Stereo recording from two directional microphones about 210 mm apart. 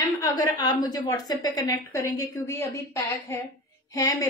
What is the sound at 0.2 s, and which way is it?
A woman's voice, 20° left (ahead or behind).